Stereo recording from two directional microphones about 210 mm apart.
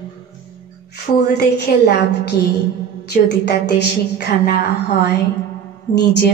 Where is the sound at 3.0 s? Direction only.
50° left (ahead or behind).